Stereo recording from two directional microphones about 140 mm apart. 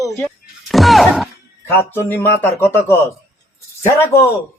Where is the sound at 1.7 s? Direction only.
15° left (ahead or behind).